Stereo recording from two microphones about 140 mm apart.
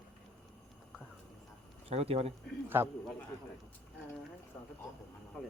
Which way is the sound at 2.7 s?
15° right (ahead or behind).